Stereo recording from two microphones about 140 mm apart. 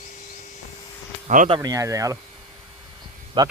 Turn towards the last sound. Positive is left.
turn(degrees=-35)  # may be behind; listen again after turning